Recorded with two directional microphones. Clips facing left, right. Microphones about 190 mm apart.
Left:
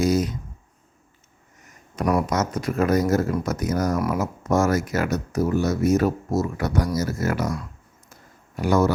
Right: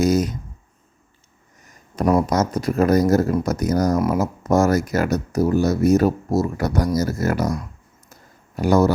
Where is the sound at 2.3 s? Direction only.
35° right (ahead or behind).